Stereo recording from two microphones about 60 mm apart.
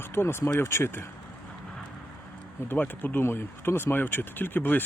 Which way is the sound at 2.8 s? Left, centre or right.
Left.